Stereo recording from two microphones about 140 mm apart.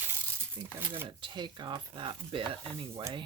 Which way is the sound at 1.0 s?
35° right (ahead or behind).